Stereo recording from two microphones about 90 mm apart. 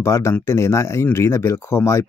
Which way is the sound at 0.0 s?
30° left (ahead or behind).